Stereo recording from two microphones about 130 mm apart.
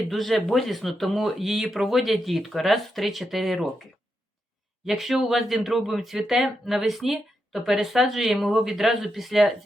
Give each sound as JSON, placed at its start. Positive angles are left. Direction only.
{"t": 0.1, "sound": "speech", "side_deg": 0}
{"t": 4.9, "sound": "speech", "side_deg": 0}